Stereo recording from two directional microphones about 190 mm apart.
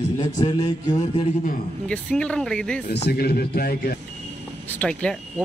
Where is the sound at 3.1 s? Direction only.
55° left (ahead or behind).